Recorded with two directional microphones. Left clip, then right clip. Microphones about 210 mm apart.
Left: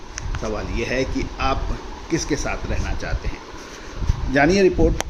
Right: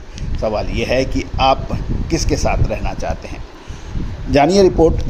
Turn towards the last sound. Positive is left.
turn(degrees=-20)  # may be behind; listen again after turning